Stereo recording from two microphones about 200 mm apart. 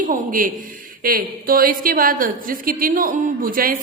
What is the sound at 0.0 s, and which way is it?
A man's voice, 40° right (ahead or behind).